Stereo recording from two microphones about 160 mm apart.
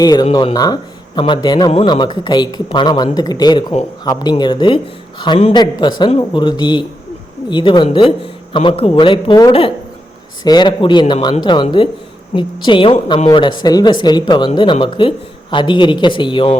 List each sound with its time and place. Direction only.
0.0 s a man's voice: 25° left (ahead or behind)